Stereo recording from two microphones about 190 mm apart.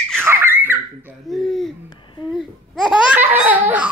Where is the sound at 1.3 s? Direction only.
Centre (ahead or behind).